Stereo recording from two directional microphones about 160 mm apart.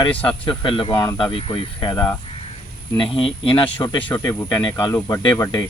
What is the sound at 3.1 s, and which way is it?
Speech, 35° left (ahead or behind).